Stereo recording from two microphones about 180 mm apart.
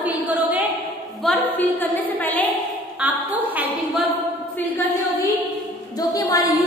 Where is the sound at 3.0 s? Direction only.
5° right (ahead or behind).